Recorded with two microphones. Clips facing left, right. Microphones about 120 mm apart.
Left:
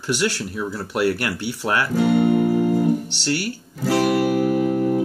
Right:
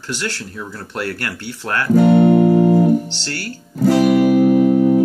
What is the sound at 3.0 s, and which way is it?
Speech, 15° left (ahead or behind).